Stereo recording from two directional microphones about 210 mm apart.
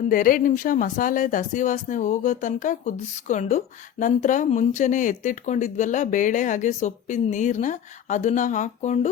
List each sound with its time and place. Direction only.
0.1 s speech: 40° left (ahead or behind)